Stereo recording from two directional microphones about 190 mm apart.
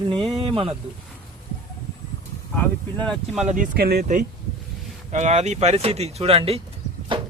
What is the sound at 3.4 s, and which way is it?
Speech, 40° right (ahead or behind).